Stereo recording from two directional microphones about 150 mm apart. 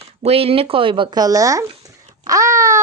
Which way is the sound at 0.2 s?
40° right (ahead or behind).